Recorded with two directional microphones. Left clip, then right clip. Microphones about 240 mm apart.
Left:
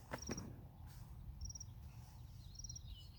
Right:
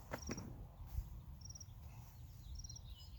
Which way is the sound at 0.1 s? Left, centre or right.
Centre.